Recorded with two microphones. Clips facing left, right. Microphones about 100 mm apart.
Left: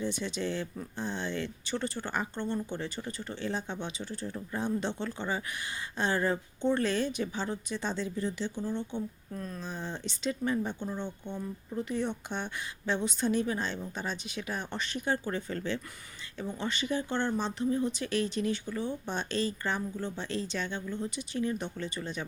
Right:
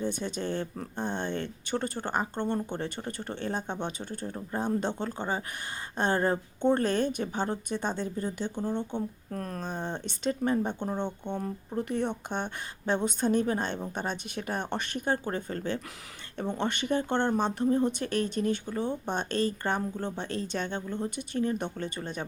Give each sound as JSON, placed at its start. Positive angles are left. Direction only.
{"t": 0.0, "sound": "speech", "side_deg": -50}
{"t": 16.4, "sound": "speech", "side_deg": -60}